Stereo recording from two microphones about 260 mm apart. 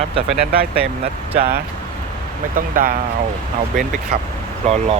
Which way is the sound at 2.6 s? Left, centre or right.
Right.